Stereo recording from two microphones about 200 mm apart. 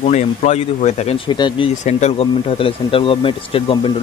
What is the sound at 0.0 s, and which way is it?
A man's voice, 35° left (ahead or behind).